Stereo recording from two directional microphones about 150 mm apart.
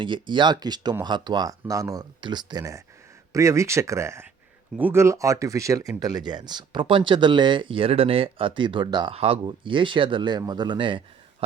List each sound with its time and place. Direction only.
0.0 s speech: 30° right (ahead or behind)